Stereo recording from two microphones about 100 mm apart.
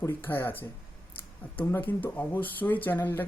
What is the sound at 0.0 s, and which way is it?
Speech, 20° left (ahead or behind).